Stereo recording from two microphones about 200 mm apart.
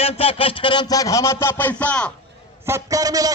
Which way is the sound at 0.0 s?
30° left (ahead or behind).